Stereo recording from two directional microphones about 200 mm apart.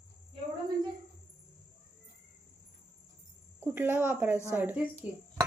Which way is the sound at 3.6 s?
10° right (ahead or behind).